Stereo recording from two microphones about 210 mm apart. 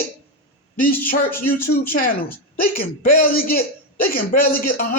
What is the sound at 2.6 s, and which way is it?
A man's voice, 45° left (ahead or behind).